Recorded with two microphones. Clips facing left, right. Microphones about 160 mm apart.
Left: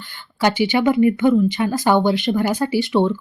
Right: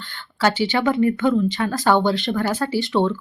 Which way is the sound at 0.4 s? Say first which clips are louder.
Left 2 dB; 15° left (ahead or behind).